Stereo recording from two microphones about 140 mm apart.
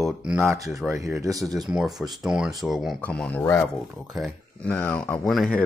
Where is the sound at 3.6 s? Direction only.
Centre (ahead or behind).